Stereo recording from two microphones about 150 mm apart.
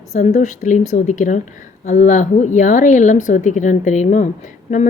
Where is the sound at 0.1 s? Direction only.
50° left (ahead or behind).